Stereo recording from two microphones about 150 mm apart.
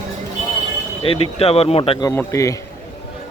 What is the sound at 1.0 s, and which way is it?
Speech, 40° left (ahead or behind).